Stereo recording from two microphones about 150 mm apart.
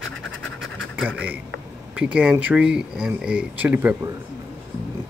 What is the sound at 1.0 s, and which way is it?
A man's voice, 10° right (ahead or behind).